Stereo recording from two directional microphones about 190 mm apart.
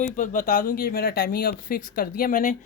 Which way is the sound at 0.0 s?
45° left (ahead or behind).